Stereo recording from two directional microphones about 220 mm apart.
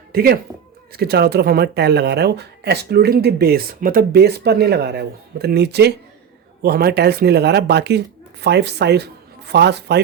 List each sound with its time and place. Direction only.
0.1 s speech: 45° right (ahead or behind)